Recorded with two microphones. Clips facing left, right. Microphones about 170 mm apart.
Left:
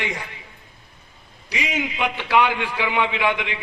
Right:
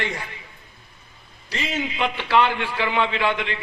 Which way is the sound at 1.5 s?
15° left (ahead or behind).